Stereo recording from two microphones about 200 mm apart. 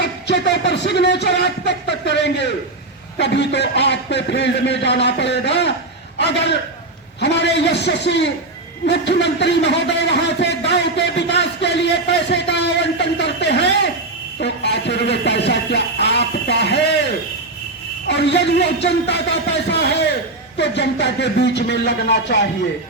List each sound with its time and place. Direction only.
0.0 s speech: 60° left (ahead or behind)
18.1 s speech: 60° left (ahead or behind)